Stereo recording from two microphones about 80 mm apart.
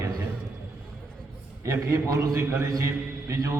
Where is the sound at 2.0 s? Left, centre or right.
Right.